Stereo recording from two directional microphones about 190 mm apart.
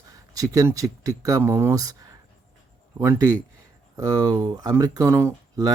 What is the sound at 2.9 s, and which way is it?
Speech, 15° right (ahead or behind).